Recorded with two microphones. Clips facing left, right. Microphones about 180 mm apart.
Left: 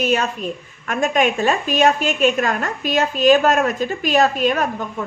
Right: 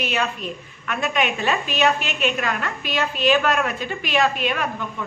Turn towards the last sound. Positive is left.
turn(degrees=45)  # may be behind; listen again after turning